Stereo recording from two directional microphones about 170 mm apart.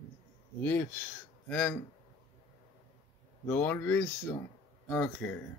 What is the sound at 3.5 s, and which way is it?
Speech, 10° left (ahead or behind).